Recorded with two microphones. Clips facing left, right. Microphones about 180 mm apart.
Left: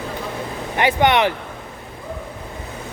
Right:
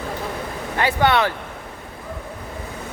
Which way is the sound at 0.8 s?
20° left (ahead or behind).